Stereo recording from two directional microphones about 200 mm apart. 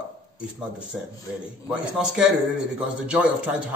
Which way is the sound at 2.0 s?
5° right (ahead or behind).